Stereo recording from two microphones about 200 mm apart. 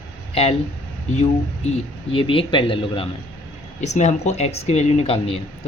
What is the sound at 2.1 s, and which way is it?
Speech, 25° left (ahead or behind).